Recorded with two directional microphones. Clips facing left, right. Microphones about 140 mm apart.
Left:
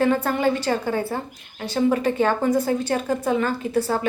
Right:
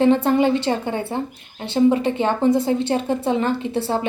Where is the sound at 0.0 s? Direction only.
25° right (ahead or behind).